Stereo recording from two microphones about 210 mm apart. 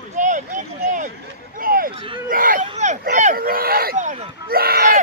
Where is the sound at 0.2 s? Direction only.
35° right (ahead or behind).